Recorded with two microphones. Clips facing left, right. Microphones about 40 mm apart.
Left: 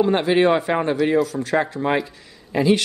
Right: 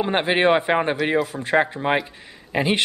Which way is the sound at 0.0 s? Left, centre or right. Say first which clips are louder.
Left 2 dB; right.